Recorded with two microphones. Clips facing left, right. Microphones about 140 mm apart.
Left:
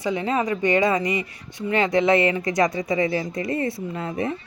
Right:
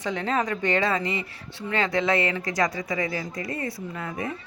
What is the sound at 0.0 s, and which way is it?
Speech, 10° left (ahead or behind).